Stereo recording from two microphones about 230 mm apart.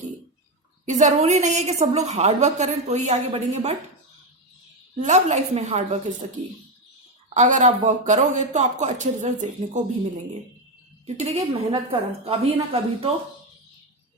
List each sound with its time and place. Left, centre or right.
0.9 s a woman's voice: right
5.0 s a woman's voice: right
7.3 s speech: right
11.0 s a woman's voice: right